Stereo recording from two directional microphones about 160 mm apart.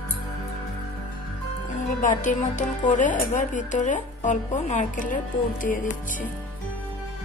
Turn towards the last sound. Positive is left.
turn(degrees=55)  # may be behind; listen again after turning